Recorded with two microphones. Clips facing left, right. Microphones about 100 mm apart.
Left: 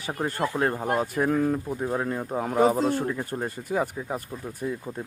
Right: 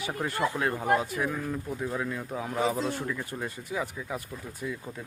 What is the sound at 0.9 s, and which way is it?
Speech, 45° left (ahead or behind).